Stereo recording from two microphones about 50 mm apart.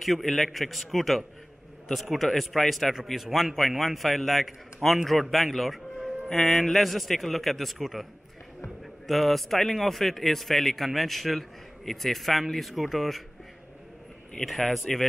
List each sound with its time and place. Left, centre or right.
0.0 s speech: centre
14.4 s speech: centre